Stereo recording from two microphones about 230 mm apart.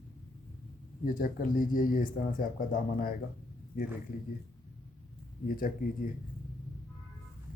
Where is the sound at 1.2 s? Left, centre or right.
Left.